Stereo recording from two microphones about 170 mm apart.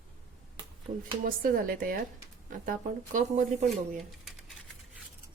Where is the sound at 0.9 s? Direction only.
45° right (ahead or behind).